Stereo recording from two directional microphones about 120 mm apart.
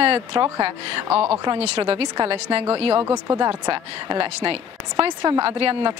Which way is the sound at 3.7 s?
50° right (ahead or behind).